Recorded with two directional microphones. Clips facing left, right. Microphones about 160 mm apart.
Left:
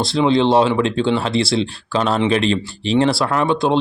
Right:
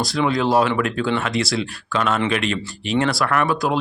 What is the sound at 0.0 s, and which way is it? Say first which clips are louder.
Speech: left 5 dB; 25° left (ahead or behind).